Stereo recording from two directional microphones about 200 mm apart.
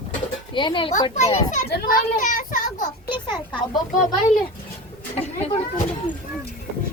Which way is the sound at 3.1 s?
25° left (ahead or behind).